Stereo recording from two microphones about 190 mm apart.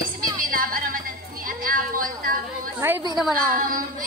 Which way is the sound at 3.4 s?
45° right (ahead or behind).